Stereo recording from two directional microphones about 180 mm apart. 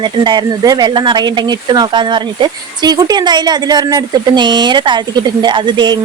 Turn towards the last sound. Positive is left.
turn(degrees=-25)  # may be behind; listen again after turning